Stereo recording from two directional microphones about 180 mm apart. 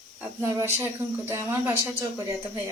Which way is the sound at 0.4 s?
15° right (ahead or behind).